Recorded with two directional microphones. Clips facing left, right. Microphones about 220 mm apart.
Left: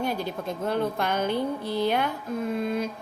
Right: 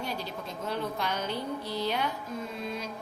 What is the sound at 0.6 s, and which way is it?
A woman's voice, 55° left (ahead or behind).